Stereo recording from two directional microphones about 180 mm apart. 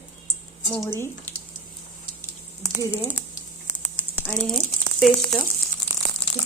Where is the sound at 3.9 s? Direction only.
10° left (ahead or behind).